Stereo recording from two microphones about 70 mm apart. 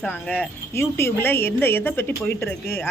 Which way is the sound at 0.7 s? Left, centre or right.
Left.